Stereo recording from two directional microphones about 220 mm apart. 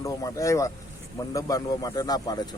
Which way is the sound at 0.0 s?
15° left (ahead or behind).